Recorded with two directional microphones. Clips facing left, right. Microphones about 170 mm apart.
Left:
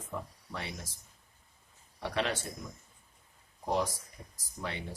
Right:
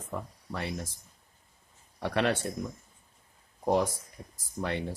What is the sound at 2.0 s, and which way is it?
Speech, 55° right (ahead or behind).